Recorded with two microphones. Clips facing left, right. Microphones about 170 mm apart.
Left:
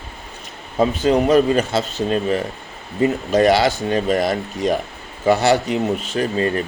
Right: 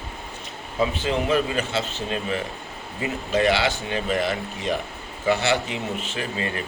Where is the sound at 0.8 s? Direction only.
40° left (ahead or behind).